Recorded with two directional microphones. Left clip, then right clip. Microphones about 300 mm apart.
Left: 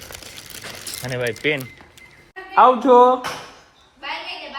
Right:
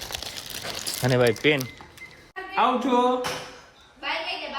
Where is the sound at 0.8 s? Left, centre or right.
Right.